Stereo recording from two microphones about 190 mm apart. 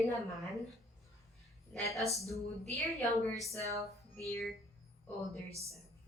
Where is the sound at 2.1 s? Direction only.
15° right (ahead or behind).